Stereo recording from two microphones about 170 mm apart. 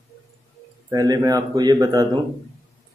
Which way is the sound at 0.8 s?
20° right (ahead or behind).